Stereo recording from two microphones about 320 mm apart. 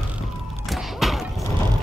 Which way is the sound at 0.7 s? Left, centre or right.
Centre.